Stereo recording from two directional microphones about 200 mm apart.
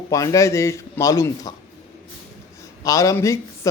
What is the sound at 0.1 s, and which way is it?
A man's voice, 15° left (ahead or behind).